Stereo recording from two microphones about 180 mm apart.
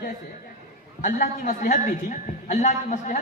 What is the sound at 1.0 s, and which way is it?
A woman's voice, 45° left (ahead or behind).